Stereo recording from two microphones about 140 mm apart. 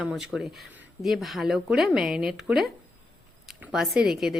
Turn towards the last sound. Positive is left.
turn(degrees=-5)  # may be behind; listen again after turning